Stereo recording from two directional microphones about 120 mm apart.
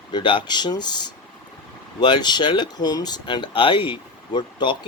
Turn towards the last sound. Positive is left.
turn(degrees=40)  # may be behind; listen again after turning